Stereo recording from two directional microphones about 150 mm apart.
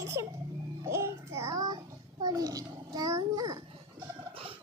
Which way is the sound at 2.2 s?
25° right (ahead or behind).